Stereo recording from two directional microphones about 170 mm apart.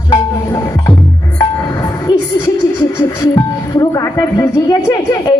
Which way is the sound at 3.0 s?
20° left (ahead or behind).